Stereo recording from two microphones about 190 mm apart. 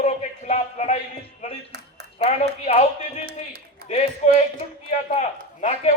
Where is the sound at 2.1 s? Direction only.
35° left (ahead or behind).